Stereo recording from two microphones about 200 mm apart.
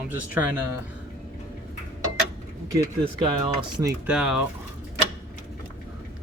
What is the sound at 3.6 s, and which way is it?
Speech, 20° right (ahead or behind).